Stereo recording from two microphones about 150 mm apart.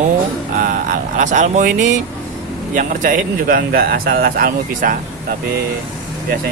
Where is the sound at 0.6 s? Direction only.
65° right (ahead or behind).